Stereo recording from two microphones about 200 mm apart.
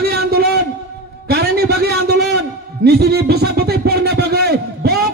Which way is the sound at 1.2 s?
50° right (ahead or behind).